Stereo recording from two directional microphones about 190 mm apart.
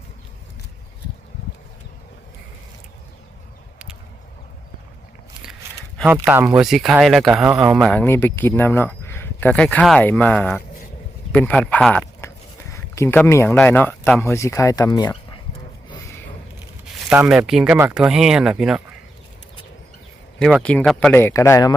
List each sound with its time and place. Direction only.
6.1 s speech: 10° right (ahead or behind); by 15.1 s 20° left (ahead or behind)
15.9 s a sound: 15° left (ahead or behind)
17.1 s speech: 5° right (ahead or behind)
20.4 s speech: 5° left (ahead or behind)
21.1 s speech: 10° left (ahead or behind)